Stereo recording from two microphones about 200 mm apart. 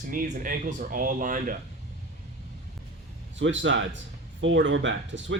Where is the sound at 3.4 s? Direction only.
65° right (ahead or behind).